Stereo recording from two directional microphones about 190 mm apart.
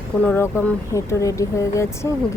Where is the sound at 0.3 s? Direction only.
10° left (ahead or behind).